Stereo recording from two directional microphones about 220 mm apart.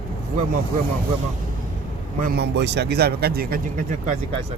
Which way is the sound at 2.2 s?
45° right (ahead or behind).